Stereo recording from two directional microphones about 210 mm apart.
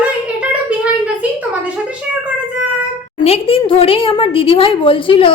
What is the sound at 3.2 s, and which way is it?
A woman's voice, 25° left (ahead or behind).